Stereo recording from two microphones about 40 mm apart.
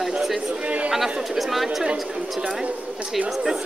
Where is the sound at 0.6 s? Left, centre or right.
Right.